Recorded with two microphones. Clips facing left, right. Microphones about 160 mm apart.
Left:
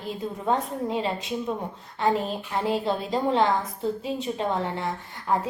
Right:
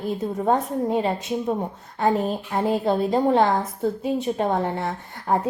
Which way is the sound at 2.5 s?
50° right (ahead or behind).